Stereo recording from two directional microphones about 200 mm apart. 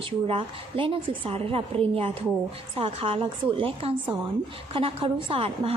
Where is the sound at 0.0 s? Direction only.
25° right (ahead or behind).